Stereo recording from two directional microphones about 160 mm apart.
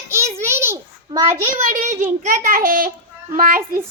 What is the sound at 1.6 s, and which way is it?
A child's voice, 50° right (ahead or behind).